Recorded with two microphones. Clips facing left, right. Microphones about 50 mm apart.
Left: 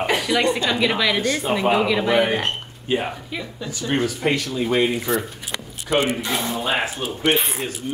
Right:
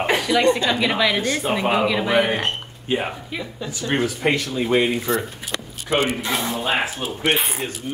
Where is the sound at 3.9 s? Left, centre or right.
Centre.